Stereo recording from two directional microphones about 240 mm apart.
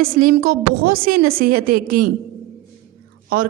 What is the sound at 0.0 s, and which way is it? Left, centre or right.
Speech, right.